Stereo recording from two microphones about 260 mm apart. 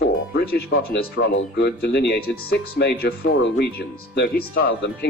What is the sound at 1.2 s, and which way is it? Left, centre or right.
Speech, left.